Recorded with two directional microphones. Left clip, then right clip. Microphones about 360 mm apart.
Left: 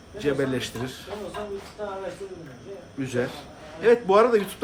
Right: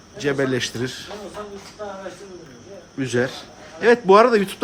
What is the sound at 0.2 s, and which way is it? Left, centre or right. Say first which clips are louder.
Speech: right 4 dB; right.